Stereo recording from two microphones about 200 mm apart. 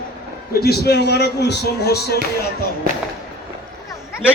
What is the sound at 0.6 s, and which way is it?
Speech, 55° left (ahead or behind).